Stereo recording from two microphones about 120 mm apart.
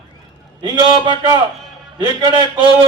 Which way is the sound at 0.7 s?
40° right (ahead or behind).